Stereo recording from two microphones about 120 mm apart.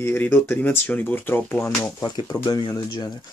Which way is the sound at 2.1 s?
30° left (ahead or behind).